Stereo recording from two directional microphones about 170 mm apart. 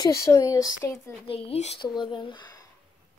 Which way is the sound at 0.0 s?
15° left (ahead or behind).